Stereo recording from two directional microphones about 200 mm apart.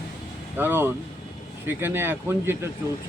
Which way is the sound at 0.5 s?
10° right (ahead or behind).